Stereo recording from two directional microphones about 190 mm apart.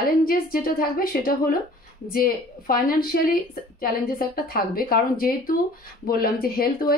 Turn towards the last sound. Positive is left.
turn(degrees=50)  # may be behind; listen again after turning